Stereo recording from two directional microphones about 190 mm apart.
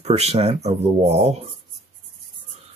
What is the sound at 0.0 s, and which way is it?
Speech, 35° right (ahead or behind).